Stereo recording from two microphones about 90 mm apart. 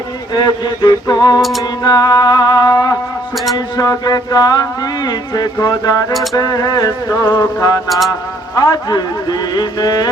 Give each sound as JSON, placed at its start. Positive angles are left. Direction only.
{"t": 0.3, "sound": "speech", "side_deg": 50}
{"t": 1.4, "sound": "music", "side_deg": 0}
{"t": 1.8, "sound": "speech", "side_deg": 50}
{"t": 7.9, "sound": "music", "side_deg": 0}
{"t": 8.5, "sound": "speech", "side_deg": 45}